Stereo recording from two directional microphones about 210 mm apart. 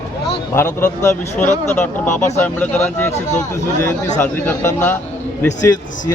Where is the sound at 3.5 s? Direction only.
15° left (ahead or behind).